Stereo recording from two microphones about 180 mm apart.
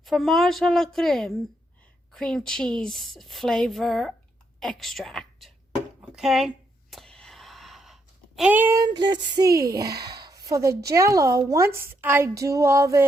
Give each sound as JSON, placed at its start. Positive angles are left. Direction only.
{"t": 0.0, "sound": "a woman's voice", "side_deg": 0}
{"t": 6.0, "sound": "a sound", "side_deg": 0}
{"t": 10.8, "sound": "a woman's voice", "side_deg": -15}